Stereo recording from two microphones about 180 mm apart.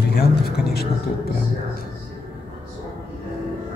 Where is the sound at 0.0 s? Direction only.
60° left (ahead or behind).